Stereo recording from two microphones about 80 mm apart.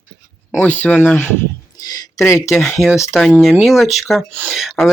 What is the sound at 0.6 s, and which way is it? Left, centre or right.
Speech, left.